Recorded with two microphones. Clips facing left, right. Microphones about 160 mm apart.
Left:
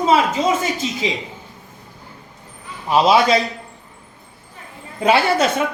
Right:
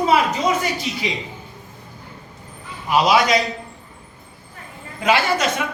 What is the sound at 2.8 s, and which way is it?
Speech, 30° left (ahead or behind).